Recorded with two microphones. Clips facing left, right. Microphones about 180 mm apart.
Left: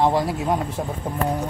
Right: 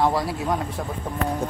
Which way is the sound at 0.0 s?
25° left (ahead or behind).